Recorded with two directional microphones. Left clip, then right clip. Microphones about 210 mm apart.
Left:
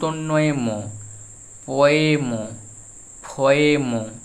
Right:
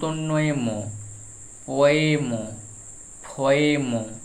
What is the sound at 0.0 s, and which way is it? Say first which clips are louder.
Speech: left 4 dB; 30° left (ahead or behind).